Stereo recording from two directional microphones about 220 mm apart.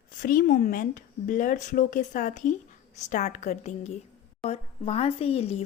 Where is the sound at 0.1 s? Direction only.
40° left (ahead or behind).